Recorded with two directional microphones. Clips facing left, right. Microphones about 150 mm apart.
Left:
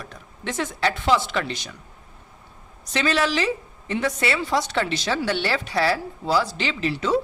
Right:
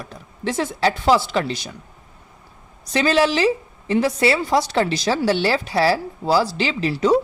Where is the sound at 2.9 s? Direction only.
35° right (ahead or behind).